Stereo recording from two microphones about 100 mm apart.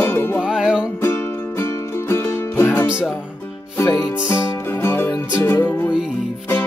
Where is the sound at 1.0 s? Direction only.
25° left (ahead or behind).